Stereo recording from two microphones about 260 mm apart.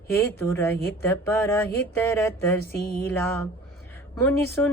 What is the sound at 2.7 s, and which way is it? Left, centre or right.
Music, left.